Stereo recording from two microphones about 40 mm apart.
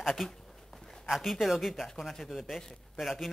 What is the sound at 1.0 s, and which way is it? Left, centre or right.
Speech, centre.